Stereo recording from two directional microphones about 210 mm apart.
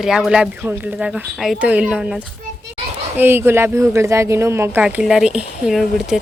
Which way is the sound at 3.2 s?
10° right (ahead or behind).